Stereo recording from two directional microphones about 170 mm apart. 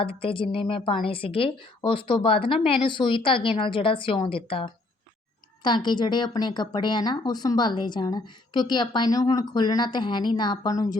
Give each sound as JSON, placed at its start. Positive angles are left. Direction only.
{"t": 0.0, "sound": "a woman's voice", "side_deg": 35}